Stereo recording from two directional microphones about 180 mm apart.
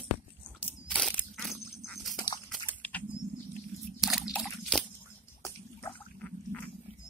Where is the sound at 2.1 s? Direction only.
25° left (ahead or behind).